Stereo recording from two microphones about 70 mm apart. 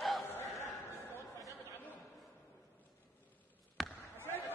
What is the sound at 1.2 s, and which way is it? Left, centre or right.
Chatter, left.